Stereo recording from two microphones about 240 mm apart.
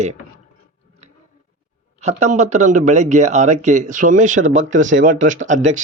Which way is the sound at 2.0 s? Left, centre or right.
Right.